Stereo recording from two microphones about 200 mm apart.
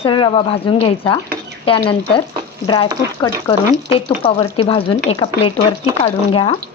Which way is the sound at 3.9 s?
25° left (ahead or behind).